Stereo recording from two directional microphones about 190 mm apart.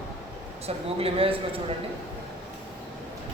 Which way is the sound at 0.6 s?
30° right (ahead or behind).